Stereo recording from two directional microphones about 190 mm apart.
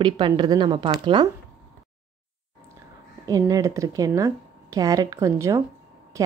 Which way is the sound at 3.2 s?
20° right (ahead or behind).